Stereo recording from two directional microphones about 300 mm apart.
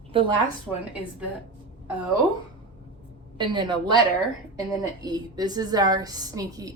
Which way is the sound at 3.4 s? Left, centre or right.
Centre.